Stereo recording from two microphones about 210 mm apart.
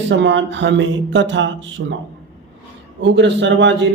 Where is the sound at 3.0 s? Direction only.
55° right (ahead or behind).